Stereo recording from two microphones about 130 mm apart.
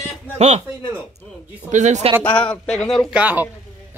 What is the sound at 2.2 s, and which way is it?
Speech, 10° left (ahead or behind).